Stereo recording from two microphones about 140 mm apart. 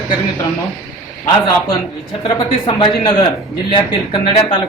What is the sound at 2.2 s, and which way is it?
Speech, 35° left (ahead or behind).